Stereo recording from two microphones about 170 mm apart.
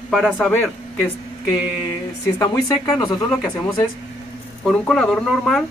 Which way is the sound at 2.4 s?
20° left (ahead or behind).